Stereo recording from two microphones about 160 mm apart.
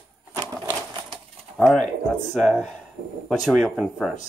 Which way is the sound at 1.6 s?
Centre (ahead or behind).